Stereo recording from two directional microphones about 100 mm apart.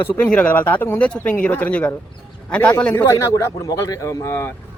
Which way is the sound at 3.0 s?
30° left (ahead or behind).